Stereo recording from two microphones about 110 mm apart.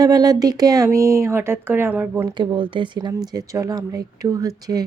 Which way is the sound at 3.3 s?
30° right (ahead or behind).